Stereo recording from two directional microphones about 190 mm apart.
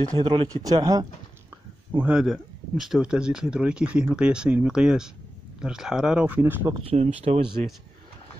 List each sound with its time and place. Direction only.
0.0 s speech: 20° right (ahead or behind)
1.9 s speech: 10° right (ahead or behind)
6.7 s speech: 35° right (ahead or behind)